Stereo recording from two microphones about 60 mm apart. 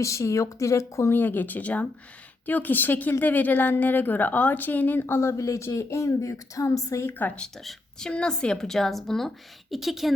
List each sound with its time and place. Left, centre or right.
0.0 s a woman's voice: left
1.1 s speech: left
4.9 s a woman's voice: left
5.4 s a woman's voice: left
7.1 s speech: left
7.6 s a woman's voice: centre